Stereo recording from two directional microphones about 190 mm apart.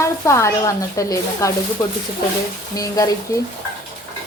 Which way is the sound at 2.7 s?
20° left (ahead or behind).